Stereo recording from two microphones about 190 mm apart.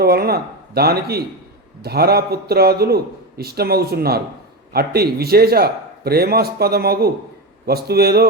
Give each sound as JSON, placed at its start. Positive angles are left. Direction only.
{"t": 0.0, "sound": "a man's voice", "side_deg": -55}